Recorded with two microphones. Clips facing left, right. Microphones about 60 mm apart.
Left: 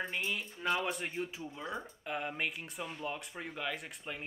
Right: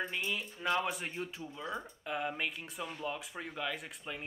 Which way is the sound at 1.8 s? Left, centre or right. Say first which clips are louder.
Right 1 dB; centre.